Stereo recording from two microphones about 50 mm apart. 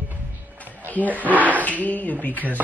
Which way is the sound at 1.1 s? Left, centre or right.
Right.